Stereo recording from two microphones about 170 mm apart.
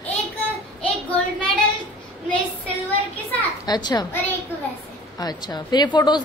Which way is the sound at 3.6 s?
25° left (ahead or behind).